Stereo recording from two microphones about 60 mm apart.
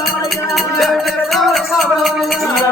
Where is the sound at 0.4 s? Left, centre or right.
Centre.